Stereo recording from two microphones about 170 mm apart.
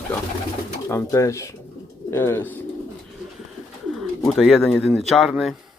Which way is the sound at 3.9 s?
Centre (ahead or behind).